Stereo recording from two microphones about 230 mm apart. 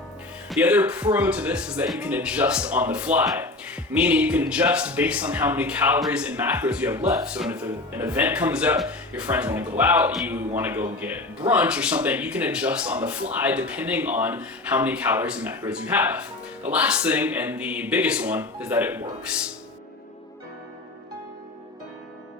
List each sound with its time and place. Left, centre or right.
0.5 s speech: centre